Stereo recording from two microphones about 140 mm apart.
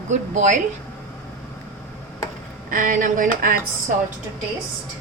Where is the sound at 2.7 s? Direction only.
70° right (ahead or behind).